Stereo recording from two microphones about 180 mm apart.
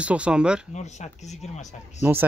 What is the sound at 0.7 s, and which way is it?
Speech, 40° left (ahead or behind).